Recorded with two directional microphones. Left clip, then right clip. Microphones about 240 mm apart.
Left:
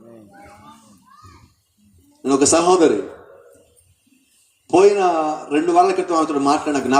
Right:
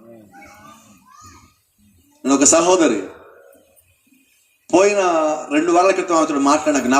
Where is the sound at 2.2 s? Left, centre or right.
Right.